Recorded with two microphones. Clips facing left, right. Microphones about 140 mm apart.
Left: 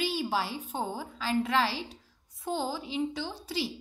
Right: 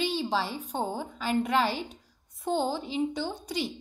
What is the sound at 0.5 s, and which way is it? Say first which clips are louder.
A woman's voice: right 2 dB; 40° right (ahead or behind).